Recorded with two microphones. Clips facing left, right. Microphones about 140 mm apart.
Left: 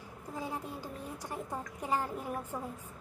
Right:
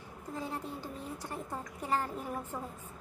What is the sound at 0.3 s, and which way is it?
A woman's voice, 10° left (ahead or behind).